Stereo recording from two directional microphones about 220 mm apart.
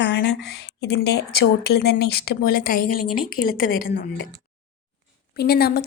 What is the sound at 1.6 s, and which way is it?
A woman's voice, 45° left (ahead or behind).